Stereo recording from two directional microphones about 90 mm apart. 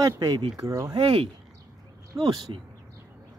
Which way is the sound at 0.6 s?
40° right (ahead or behind).